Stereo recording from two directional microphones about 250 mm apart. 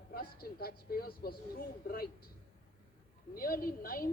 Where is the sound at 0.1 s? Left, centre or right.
Left.